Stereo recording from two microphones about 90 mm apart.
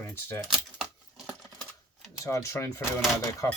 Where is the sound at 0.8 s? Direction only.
5° right (ahead or behind).